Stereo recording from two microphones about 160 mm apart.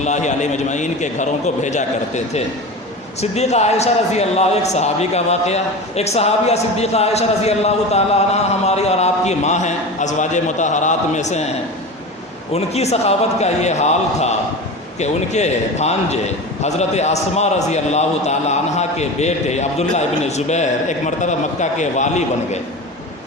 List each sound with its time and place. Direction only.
0.0 s a man's voice: 45° left (ahead or behind)
12.5 s a man's voice: 40° left (ahead or behind)